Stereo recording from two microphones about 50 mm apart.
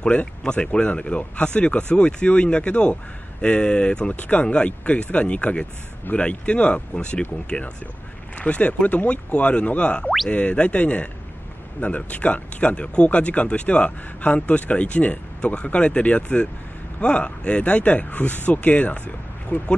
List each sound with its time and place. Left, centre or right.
0.0 s speech: left